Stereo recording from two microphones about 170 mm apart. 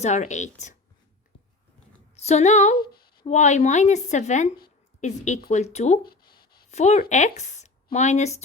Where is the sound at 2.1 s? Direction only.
40° left (ahead or behind).